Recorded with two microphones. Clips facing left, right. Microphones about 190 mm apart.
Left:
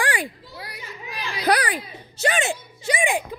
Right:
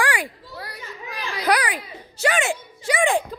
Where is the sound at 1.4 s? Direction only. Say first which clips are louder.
Left 1 dB; 30° left (ahead or behind).